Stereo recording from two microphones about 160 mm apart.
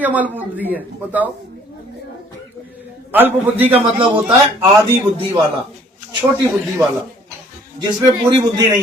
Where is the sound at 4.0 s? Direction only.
30° right (ahead or behind).